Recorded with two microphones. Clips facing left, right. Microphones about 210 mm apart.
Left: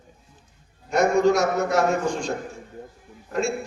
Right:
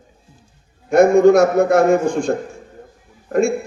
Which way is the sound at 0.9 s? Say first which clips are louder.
Right 8 dB; 55° right (ahead or behind).